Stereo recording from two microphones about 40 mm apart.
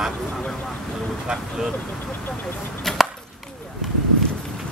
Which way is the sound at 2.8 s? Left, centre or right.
Centre.